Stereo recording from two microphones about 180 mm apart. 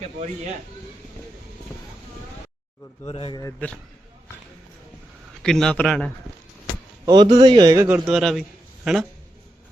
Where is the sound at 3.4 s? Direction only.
15° left (ahead or behind).